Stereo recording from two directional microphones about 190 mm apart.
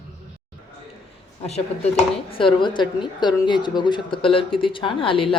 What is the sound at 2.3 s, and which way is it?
A woman's voice, 25° left (ahead or behind).